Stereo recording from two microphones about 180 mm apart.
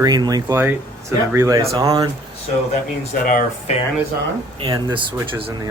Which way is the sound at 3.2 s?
50° left (ahead or behind).